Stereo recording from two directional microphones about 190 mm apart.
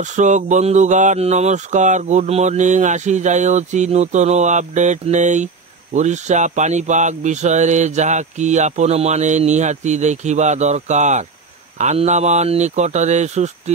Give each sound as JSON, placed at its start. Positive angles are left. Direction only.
{"t": 0.0, "sound": "speech", "side_deg": -40}